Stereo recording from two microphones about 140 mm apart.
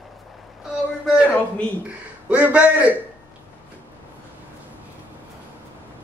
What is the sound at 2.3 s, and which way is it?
Speech, 10° right (ahead or behind).